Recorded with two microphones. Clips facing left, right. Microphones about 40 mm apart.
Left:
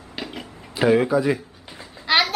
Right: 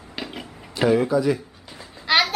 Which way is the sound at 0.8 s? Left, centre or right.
Left.